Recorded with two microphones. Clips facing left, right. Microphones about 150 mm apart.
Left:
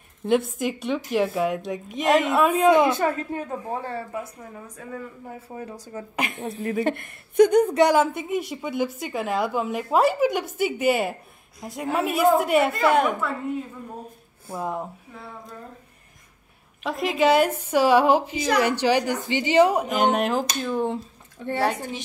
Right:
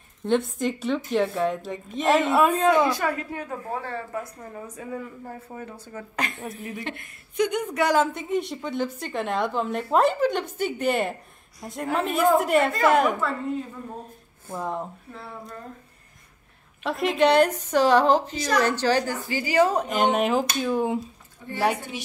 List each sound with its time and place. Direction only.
0.2 s a woman's voice: 5° left (ahead or behind)
2.5 s a woman's voice: 15° left (ahead or behind)
3.6 s a woman's voice: 15° left (ahead or behind)
4.4 s a woman's voice: centre (ahead or behind)
5.3 s a woman's voice: 15° left (ahead or behind)
6.8 s a woman's voice: 55° left (ahead or behind)
7.9 s a woman's voice: 10° left (ahead or behind)
14.5 s a woman's voice: 10° left (ahead or behind)
16.8 s a woman's voice: centre (ahead or behind); by 19.7 s 20° left (ahead or behind)
19.7 s a woman's voice: 5° left (ahead or behind)
21.4 s a woman's voice: 90° left